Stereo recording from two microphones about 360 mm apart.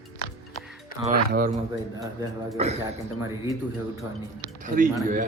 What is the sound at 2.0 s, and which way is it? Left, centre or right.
Speech, centre.